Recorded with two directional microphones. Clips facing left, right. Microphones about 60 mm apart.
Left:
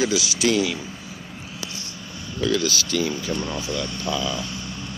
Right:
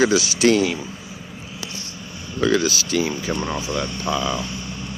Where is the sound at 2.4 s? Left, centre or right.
Right.